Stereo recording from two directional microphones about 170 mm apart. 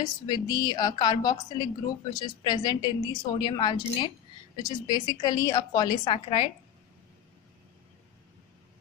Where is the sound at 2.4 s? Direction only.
25° left (ahead or behind).